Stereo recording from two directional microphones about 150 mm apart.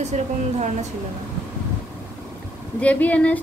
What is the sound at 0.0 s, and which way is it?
Speech, 50° right (ahead or behind).